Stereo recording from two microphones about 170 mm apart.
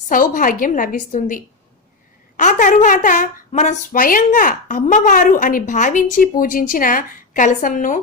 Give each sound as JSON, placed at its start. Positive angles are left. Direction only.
{"t": 0.1, "sound": "a woman's voice", "side_deg": 50}